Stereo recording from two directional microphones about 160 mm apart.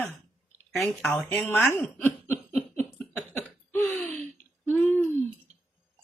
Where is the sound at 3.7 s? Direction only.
10° left (ahead or behind).